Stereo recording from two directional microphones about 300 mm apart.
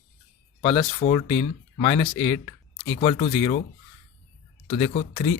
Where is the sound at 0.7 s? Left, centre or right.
Left.